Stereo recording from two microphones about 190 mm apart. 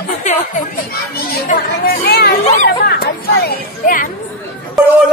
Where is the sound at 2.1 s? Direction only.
60° left (ahead or behind).